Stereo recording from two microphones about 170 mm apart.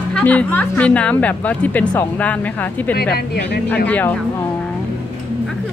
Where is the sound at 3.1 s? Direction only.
70° left (ahead or behind).